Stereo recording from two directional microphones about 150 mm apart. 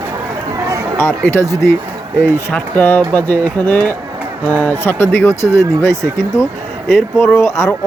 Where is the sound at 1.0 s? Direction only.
15° left (ahead or behind).